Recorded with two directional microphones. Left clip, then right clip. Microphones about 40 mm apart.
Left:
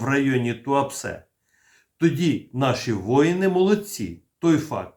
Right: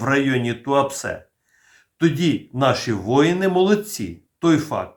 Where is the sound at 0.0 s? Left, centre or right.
Right.